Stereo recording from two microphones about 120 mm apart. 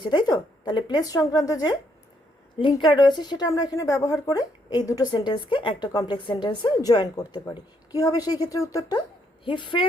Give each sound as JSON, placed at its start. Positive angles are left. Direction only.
{"t": 0.0, "sound": "a woman's voice", "side_deg": 40}
{"t": 2.6, "sound": "a woman's voice", "side_deg": 45}